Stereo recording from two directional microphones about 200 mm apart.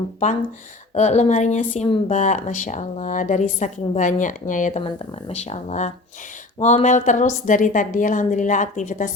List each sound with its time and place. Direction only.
0.9 s speech: 35° left (ahead or behind)
4.8 s speech: 30° left (ahead or behind)